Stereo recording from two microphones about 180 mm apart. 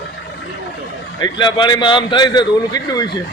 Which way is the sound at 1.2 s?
25° left (ahead or behind).